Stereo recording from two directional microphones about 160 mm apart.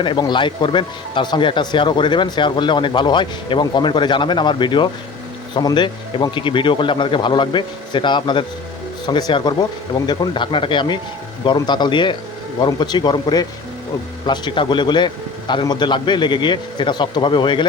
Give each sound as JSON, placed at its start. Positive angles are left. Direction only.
{"t": 0.0, "sound": "speech", "side_deg": 30}